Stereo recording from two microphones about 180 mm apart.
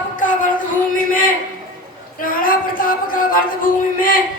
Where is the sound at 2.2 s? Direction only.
50° left (ahead or behind).